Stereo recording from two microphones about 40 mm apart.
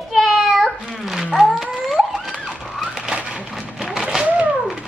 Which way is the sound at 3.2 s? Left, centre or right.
Right.